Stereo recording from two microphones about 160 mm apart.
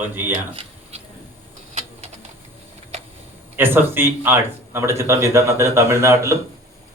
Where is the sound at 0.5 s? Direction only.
40° right (ahead or behind).